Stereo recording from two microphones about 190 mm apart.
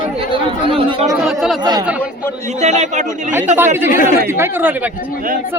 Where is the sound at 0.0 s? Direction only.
25° right (ahead or behind).